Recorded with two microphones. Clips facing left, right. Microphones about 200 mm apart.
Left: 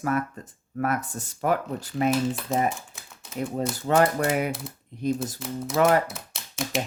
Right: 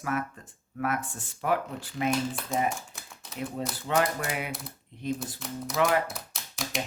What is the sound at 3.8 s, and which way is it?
Speech, 45° left (ahead or behind).